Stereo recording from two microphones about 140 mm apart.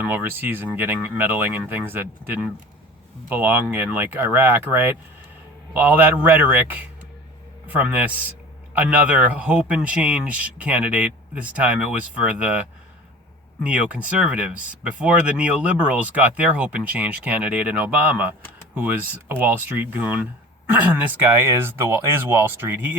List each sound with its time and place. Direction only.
0.0 s speech: 15° right (ahead or behind)